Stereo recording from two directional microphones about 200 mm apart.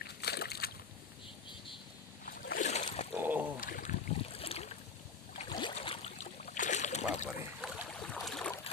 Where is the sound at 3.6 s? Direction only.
40° left (ahead or behind).